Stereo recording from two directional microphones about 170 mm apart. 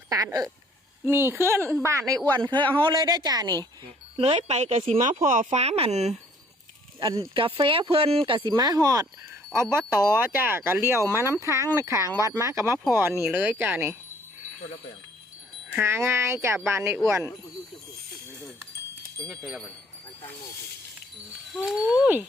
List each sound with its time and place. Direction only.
0.1 s a woman's voice: 20° right (ahead or behind)
2.2 s speech: 10° left (ahead or behind)
2.8 s a woman's voice: 25° right (ahead or behind)
4.2 s speech: 40° right (ahead or behind)
5.2 s speech: 50° right (ahead or behind)
7.0 s speech: 25° right (ahead or behind)
15.7 s speech: 15° right (ahead or behind)
19.3 s speech: centre (ahead or behind)
21.5 s speech: centre (ahead or behind)